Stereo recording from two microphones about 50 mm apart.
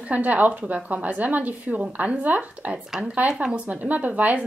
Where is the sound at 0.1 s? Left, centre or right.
Right.